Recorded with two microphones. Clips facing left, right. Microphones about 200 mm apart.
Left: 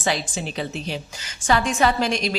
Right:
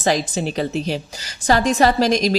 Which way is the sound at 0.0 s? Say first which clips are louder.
Right 6 dB; 40° right (ahead or behind).